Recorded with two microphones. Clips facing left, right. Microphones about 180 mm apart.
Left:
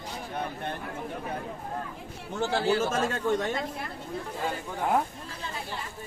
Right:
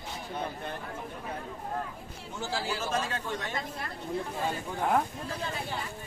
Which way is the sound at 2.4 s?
60° left (ahead or behind).